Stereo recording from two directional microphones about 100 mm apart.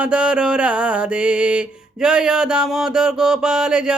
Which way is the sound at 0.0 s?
10° right (ahead or behind).